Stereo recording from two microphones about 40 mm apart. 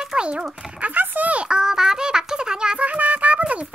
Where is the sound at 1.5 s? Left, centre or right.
Centre.